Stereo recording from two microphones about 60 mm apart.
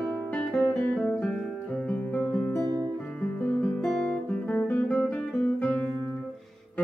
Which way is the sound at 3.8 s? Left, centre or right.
Centre.